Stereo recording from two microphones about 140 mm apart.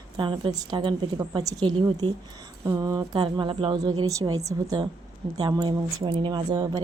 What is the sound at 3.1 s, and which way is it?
Speech, 35° right (ahead or behind).